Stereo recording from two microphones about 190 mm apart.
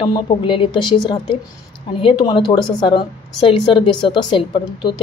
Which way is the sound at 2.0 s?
25° left (ahead or behind).